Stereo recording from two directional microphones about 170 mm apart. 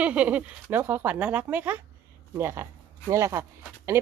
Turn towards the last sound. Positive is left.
turn(degrees=-15)  # may be behind; listen again after turning